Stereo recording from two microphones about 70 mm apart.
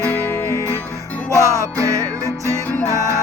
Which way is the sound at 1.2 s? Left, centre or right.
Right.